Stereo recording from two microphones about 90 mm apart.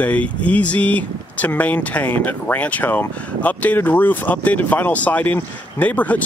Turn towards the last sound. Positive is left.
turn(degrees=15)  # may be behind; listen again after turning